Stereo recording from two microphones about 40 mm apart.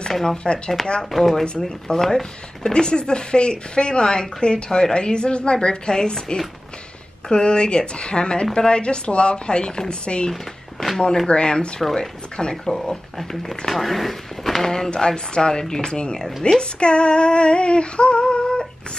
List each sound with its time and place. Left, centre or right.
0.1 s speech: centre
2.7 s a woman's voice: left
10.3 s speech: centre
11.0 s a woman's voice: centre